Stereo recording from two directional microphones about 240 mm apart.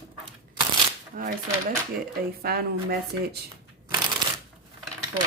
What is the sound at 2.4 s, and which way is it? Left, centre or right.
Speech, right.